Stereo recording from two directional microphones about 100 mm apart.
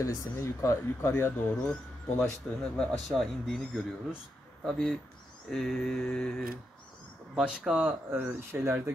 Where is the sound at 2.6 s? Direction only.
5° left (ahead or behind).